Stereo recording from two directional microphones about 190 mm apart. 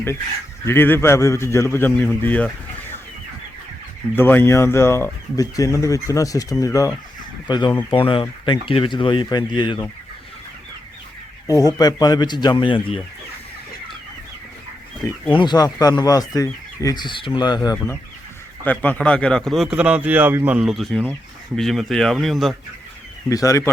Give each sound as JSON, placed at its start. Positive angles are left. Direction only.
{"t": 0.6, "sound": "speech", "side_deg": 10}
{"t": 4.1, "sound": "speech", "side_deg": 10}
{"t": 11.4, "sound": "speech", "side_deg": 20}
{"t": 15.3, "sound": "speech", "side_deg": 25}
{"t": 18.6, "sound": "speech", "side_deg": 10}
{"t": 23.3, "sound": "speech", "side_deg": 15}